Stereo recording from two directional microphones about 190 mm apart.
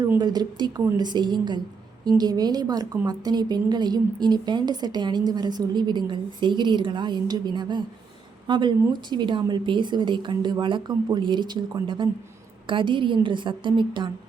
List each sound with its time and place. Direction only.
0.2 s a woman's voice: 20° right (ahead or behind)